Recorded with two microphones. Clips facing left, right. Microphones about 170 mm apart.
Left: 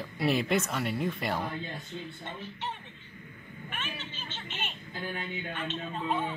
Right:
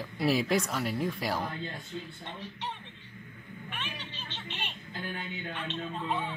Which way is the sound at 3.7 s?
5° left (ahead or behind).